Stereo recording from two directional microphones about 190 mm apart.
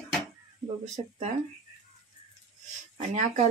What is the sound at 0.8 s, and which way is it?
Speech, 40° right (ahead or behind).